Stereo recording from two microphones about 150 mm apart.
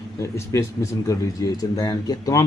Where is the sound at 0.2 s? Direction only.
20° left (ahead or behind).